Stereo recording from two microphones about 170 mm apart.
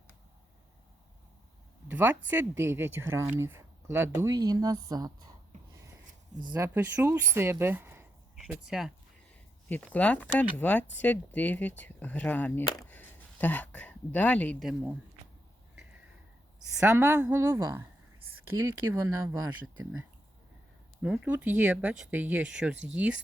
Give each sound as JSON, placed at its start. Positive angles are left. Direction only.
{"t": 1.9, "sound": "speech", "side_deg": -10}
{"t": 6.5, "sound": "speech", "side_deg": -10}
{"t": 9.6, "sound": "speech", "side_deg": 10}
{"t": 16.8, "sound": "speech", "side_deg": -15}
{"t": 21.0, "sound": "speech", "side_deg": -5}